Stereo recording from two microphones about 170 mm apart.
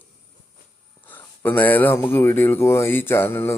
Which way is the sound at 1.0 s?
10° left (ahead or behind).